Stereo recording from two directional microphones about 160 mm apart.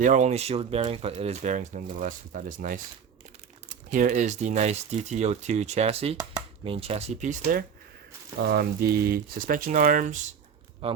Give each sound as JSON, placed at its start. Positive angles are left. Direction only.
{"t": 0.0, "sound": "speech", "side_deg": -50}
{"t": 3.9, "sound": "speech", "side_deg": -50}
{"t": 8.4, "sound": "speech", "side_deg": -80}
{"t": 10.8, "sound": "speech", "side_deg": -40}